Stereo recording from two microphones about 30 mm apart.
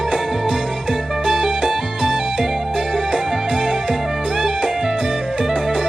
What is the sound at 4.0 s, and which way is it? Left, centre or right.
Music, centre.